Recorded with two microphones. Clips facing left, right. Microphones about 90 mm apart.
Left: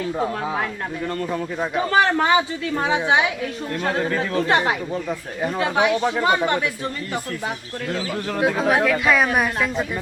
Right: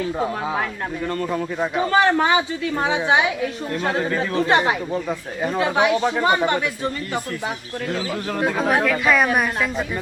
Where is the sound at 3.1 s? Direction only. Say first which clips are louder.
Right 1 dB; 25° right (ahead or behind).